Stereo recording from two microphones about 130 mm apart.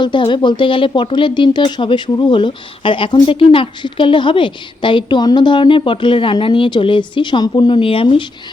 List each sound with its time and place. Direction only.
0.0 s speech: 40° left (ahead or behind)